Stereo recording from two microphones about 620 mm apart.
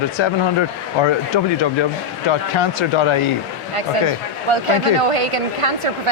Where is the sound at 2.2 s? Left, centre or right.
Left.